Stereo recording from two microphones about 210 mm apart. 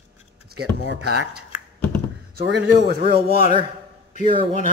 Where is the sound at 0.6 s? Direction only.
50° right (ahead or behind).